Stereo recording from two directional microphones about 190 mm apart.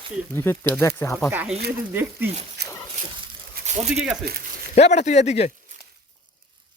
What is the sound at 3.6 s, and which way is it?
Speech, 35° right (ahead or behind).